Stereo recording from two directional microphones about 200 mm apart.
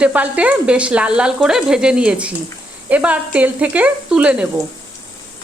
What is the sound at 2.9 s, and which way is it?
Speech, 10° right (ahead or behind).